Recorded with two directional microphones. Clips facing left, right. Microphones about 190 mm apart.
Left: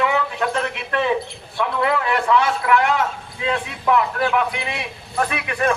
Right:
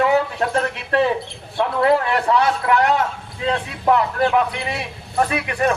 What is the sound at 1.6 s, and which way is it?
A man's voice, 35° right (ahead or behind).